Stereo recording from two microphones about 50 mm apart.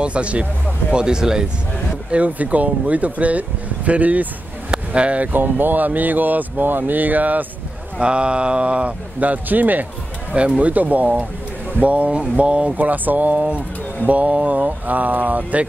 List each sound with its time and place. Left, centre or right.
0.0 s speech: right
0.9 s speech: centre
2.0 s speech: right
5.3 s speech: right
8.0 s speech: right
10.3 s speech: right